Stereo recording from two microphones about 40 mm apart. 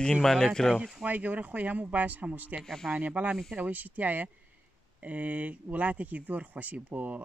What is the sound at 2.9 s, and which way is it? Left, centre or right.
Speech, right.